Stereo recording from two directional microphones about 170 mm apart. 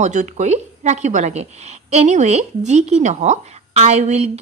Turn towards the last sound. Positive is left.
turn(degrees=-40)  # may be behind; listen again after turning